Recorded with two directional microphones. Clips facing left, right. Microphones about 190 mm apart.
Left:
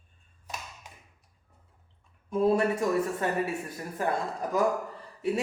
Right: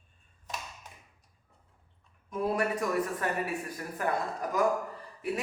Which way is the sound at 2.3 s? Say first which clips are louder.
Left 5 dB; 25° left (ahead or behind).